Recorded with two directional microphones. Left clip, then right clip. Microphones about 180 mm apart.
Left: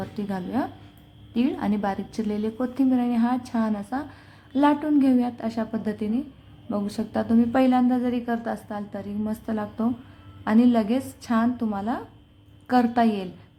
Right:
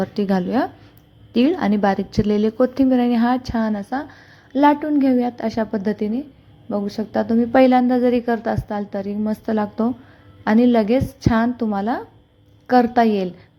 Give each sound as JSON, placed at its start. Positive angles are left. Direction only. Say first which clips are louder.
{"t": 0.0, "sound": "a woman's voice", "louder": "right 11 dB", "side_deg": -30}